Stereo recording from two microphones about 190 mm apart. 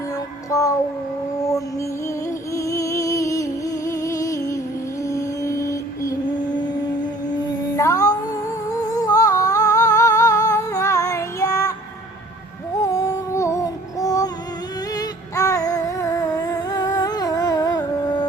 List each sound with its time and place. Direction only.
0.5 s child singing: 15° left (ahead or behind)
2.6 s music: 15° left (ahead or behind)
8.7 s humming: 20° left (ahead or behind)
12.8 s music: 15° left (ahead or behind)
14.9 s a sound: 15° left (ahead or behind)